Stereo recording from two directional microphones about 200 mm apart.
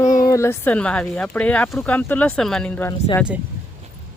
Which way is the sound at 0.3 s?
15° left (ahead or behind).